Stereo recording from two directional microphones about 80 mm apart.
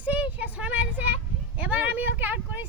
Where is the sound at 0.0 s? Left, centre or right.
Centre.